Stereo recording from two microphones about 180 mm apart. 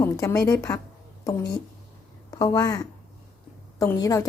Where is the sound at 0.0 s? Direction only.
15° left (ahead or behind).